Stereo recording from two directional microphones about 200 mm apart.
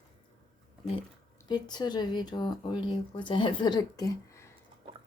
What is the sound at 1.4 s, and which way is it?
Speech, 20° left (ahead or behind).